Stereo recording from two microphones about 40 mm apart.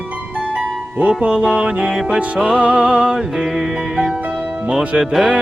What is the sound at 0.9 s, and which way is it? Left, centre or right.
Music, right.